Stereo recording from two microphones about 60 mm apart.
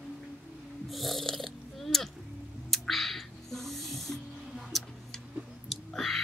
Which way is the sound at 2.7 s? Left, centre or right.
Centre.